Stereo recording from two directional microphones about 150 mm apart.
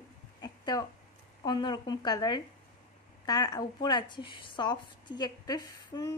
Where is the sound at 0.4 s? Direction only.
25° left (ahead or behind).